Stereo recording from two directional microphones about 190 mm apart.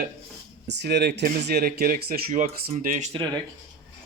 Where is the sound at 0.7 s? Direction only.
65° right (ahead or behind); by 3.1 s 40° right (ahead or behind).